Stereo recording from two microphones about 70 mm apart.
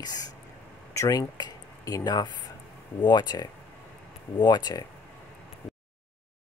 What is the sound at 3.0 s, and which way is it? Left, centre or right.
Speech, left.